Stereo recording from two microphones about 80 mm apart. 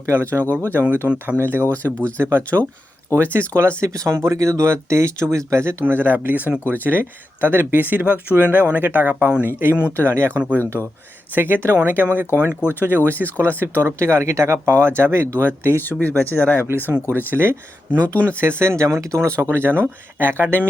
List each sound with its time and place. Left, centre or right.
0.0 s speech: right
1.0 s speech: centre
1.4 s speech: right
1.7 s speech: centre
2.1 s speech: right
3.5 s speech: right
15.8 s speech: left
16.6 s speech: right